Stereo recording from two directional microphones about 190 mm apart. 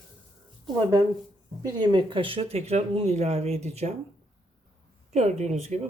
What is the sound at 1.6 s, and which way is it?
Speech, 25° right (ahead or behind).